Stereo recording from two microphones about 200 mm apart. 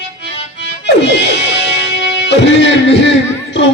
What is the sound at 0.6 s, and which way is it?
Music, 60° left (ahead or behind).